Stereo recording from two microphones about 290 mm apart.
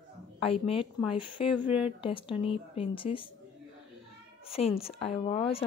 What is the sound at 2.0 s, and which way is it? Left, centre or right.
A woman's voice, centre.